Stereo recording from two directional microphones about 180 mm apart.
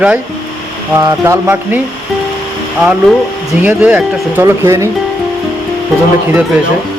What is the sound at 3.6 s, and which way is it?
Speech, 10° right (ahead or behind).